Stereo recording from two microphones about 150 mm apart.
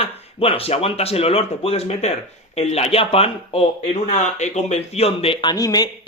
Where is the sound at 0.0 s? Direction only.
40° left (ahead or behind).